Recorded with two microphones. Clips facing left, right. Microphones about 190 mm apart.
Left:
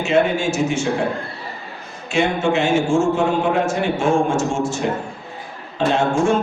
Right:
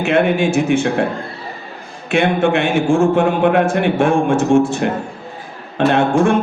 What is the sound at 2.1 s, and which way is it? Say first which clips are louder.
A man's voice: right 3 dB; 60° right (ahead or behind).